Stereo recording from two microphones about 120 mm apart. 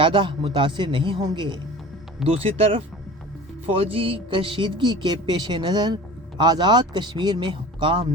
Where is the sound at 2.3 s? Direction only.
55° right (ahead or behind).